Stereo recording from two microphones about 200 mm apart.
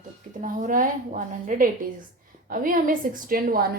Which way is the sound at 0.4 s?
40° right (ahead or behind).